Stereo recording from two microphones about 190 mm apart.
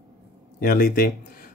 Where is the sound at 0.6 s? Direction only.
50° left (ahead or behind).